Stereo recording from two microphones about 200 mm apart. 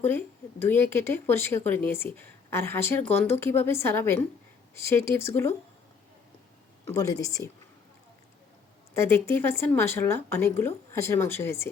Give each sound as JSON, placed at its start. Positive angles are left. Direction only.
{"t": 0.0, "sound": "speech", "side_deg": 10}
{"t": 6.8, "sound": "speech", "side_deg": 15}
{"t": 9.0, "sound": "speech", "side_deg": 10}